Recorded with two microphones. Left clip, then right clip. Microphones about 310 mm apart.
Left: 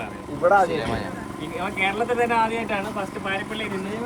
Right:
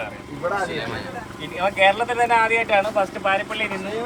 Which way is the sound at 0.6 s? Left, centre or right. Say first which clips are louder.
Left 4 dB; left.